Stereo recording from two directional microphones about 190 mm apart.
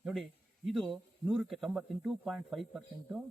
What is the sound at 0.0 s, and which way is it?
Speech, centre (ahead or behind).